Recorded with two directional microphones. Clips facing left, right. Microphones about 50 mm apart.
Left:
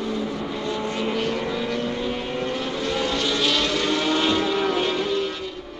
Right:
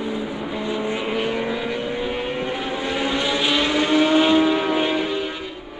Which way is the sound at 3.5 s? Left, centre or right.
Centre.